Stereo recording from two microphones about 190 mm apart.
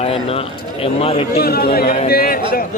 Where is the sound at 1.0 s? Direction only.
30° left (ahead or behind).